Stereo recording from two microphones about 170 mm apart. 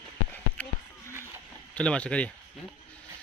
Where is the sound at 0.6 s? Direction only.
10° left (ahead or behind).